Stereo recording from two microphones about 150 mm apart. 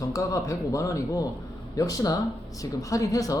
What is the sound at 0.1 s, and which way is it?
Speech, 20° left (ahead or behind).